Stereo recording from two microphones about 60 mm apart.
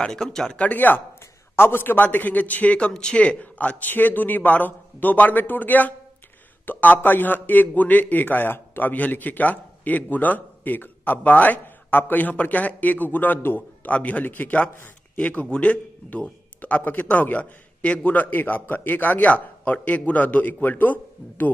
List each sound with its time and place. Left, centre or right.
0.0 s speech: centre
0.6 s a man's voice: left
2.9 s a man's voice: centre; by 21.5 s left